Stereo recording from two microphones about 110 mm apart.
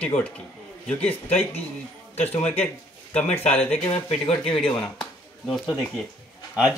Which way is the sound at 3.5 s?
15° left (ahead or behind).